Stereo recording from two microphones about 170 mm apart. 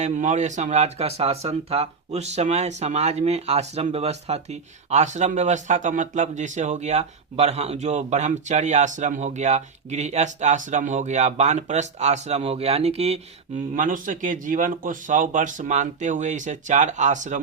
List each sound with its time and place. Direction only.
0.0 s speech: 45° right (ahead or behind)
13.7 s speech: 50° right (ahead or behind)